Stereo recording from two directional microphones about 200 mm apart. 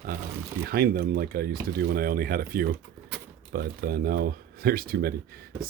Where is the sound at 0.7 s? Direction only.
50° right (ahead or behind).